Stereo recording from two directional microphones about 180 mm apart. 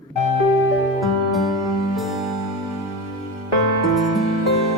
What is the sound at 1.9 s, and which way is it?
Music, centre (ahead or behind).